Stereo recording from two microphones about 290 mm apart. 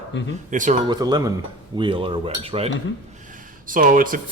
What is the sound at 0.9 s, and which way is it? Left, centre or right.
Cutlery, centre.